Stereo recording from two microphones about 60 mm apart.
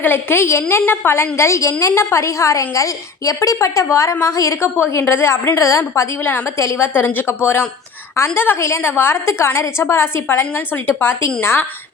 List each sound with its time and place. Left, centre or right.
0.0 s a woman's voice: left
4.9 s a woman's voice: left
5.5 s a woman's voice: left
8.2 s a woman's voice: left
8.8 s a woman's voice: left